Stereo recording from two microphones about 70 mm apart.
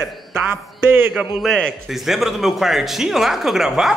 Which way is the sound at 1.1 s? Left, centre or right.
Centre.